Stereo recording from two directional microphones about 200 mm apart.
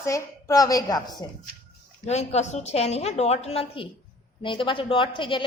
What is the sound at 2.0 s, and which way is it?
A woman's voice, 35° left (ahead or behind).